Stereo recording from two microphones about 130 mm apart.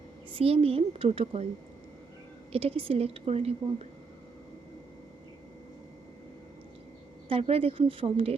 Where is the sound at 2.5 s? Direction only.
45° right (ahead or behind).